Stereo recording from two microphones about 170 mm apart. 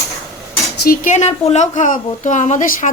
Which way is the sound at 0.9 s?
45° left (ahead or behind).